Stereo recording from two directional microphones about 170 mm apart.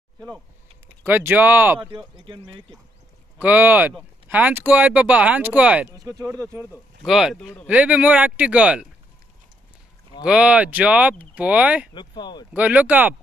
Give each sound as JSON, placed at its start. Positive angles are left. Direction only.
{"t": 1.0, "sound": "speech", "side_deg": -10}
{"t": 1.8, "sound": "speech", "side_deg": -30}
{"t": 3.3, "sound": "speech", "side_deg": -10}
{"t": 5.9, "sound": "speech", "side_deg": -20}
{"t": 7.1, "sound": "speech", "side_deg": -5}
{"t": 10.2, "sound": "speech", "side_deg": -5}
{"t": 11.9, "sound": "speech", "side_deg": 25}
{"t": 12.5, "sound": "speech", "side_deg": -10}